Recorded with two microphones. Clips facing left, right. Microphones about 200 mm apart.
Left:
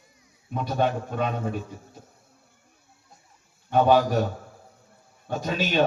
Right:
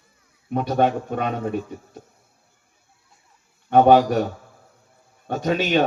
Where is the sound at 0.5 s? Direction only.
60° right (ahead or behind).